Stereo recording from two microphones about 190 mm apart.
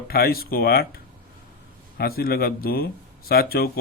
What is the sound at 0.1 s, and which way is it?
Speech, 55° left (ahead or behind).